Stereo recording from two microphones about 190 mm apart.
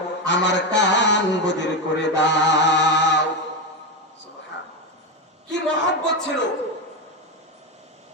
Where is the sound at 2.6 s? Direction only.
65° left (ahead or behind).